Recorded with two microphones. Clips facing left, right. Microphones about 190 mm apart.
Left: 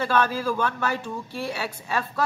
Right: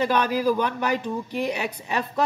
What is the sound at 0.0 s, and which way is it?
A woman's voice, 15° right (ahead or behind).